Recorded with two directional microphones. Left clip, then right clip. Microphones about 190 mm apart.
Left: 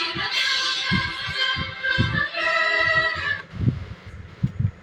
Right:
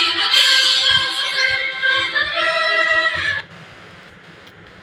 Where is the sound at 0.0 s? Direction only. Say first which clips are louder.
Right 9 dB; 30° right (ahead or behind).